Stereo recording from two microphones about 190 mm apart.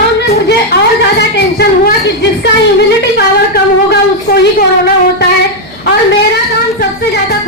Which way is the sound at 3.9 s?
60° left (ahead or behind).